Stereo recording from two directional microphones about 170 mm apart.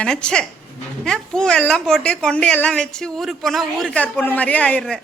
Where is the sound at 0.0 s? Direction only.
5° left (ahead or behind).